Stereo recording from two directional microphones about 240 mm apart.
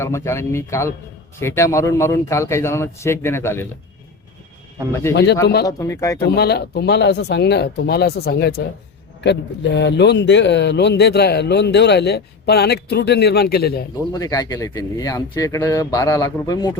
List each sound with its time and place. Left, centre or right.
0.0 s speech: centre
5.1 s speech: left
5.6 s speech: centre
6.3 s speech: left
14.1 s speech: centre